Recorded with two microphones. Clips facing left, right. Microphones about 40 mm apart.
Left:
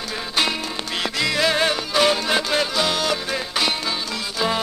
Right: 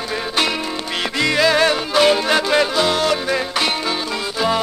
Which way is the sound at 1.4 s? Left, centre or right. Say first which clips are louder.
Right 5 dB; right.